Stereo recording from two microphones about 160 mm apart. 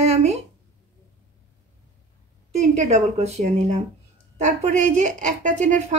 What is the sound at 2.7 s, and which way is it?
A woman's voice, 45° right (ahead or behind).